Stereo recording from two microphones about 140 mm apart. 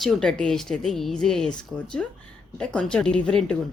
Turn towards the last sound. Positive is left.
turn(degrees=5)  # may be behind; listen again after turning